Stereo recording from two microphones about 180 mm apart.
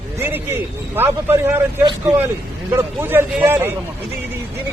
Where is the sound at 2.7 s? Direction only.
10° right (ahead or behind).